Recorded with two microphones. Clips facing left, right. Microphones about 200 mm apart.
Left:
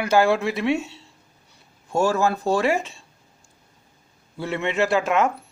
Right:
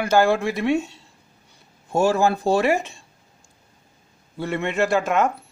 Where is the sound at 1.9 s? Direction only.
25° right (ahead or behind).